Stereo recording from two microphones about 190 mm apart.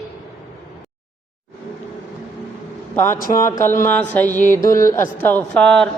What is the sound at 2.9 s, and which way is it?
Speech, 15° left (ahead or behind).